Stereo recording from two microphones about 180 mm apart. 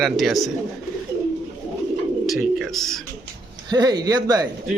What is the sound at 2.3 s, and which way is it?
Speech, centre (ahead or behind).